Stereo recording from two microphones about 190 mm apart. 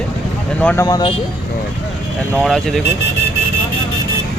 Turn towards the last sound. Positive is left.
turn(degrees=0)  # may be behind; listen again after turning